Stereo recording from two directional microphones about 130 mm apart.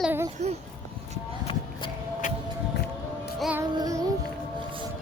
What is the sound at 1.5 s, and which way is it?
Music, 40° left (ahead or behind).